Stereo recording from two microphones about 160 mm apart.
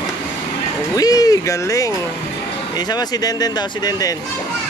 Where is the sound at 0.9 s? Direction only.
25° left (ahead or behind).